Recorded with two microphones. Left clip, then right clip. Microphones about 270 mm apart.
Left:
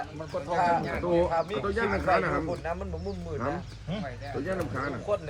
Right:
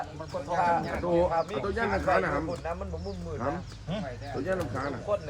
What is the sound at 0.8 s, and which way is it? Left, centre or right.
Speech, right.